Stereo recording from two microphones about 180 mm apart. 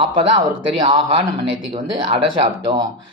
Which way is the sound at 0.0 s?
25° right (ahead or behind).